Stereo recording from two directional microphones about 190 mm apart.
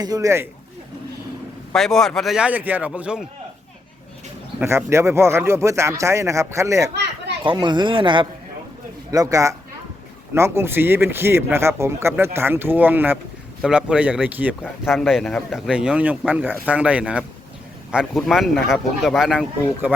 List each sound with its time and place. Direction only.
0.0 s speech: 20° right (ahead or behind)
1.7 s speech: centre (ahead or behind)
4.6 s speech: 15° right (ahead or behind)